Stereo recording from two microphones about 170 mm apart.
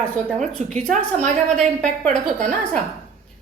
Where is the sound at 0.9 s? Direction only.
45° right (ahead or behind).